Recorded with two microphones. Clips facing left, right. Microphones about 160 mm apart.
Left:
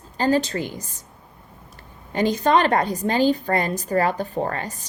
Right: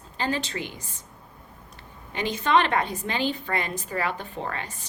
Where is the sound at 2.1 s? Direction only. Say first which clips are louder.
Left 5 dB; 40° left (ahead or behind).